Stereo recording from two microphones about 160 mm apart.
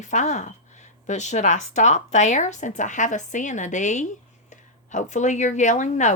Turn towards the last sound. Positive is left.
turn(degrees=50)  # may be behind; listen again after turning